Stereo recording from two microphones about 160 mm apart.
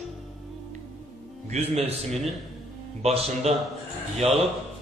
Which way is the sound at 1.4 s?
40° right (ahead or behind).